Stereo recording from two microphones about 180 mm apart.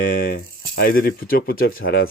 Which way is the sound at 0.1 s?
50° left (ahead or behind).